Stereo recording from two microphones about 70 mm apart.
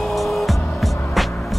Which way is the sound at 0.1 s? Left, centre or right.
Centre.